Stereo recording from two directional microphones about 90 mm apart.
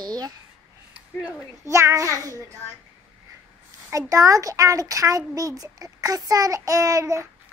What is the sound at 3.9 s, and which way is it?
A child's voice, 40° right (ahead or behind).